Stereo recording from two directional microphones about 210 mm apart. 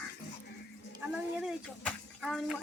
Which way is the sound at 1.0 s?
5° right (ahead or behind).